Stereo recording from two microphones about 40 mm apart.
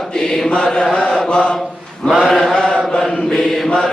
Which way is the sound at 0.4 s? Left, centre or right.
Left.